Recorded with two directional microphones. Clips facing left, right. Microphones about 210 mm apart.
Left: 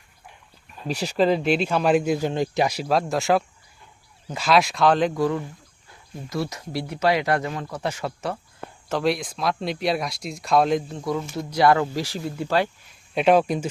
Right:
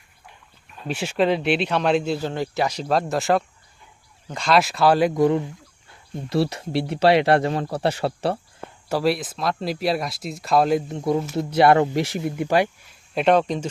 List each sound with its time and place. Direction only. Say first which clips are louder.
0.8 s speech: even; centre (ahead or behind)
2.8 s speech: right 1 dB; centre (ahead or behind)
5.1 s speech: right 5 dB; 20° right (ahead or behind)
6.2 s speech: right 6 dB; 30° right (ahead or behind)
8.9 s speech: right 2 dB; 5° right (ahead or behind)
10.8 s speech: right 4 dB; 25° right (ahead or behind)
13.1 s speech: even; 5° left (ahead or behind)